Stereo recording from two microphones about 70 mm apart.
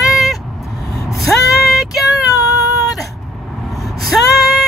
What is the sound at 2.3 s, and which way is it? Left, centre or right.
Cat, left.